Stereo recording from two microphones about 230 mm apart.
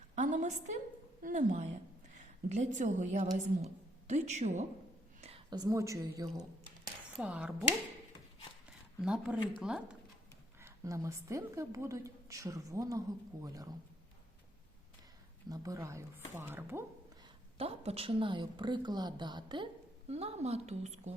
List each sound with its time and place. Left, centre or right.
0.2 s a woman's voice: right; by 6.4 s centre
7.2 s speech: centre
9.0 s a woman's voice: centre
15.4 s a woman's voice: centre
17.6 s a woman's voice: right